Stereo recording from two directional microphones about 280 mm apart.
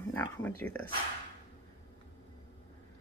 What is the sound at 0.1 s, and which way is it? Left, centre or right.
Speech, centre.